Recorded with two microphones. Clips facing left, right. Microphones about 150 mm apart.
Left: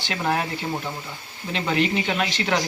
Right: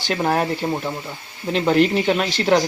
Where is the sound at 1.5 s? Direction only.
45° right (ahead or behind).